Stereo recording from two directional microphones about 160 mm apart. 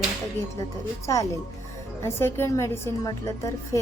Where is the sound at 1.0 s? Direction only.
20° left (ahead or behind).